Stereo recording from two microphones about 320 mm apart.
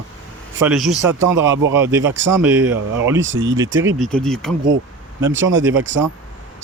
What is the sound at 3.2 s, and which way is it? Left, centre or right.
Speech, right.